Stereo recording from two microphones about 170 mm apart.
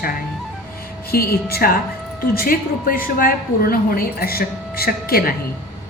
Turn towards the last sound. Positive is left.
turn(degrees=60)  # may be behind; listen again after turning